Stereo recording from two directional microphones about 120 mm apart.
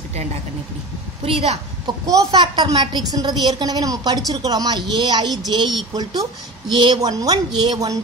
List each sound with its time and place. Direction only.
1.2 s a woman's voice: 55° right (ahead or behind)
2.3 s a woman's voice: 40° right (ahead or behind)